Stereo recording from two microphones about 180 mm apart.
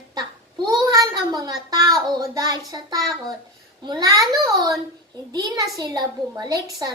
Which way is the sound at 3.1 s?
Centre (ahead or behind).